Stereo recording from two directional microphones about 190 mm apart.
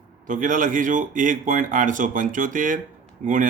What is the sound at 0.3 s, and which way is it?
A man's voice, 45° right (ahead or behind).